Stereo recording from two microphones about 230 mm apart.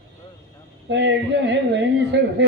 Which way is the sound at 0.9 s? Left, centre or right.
Right.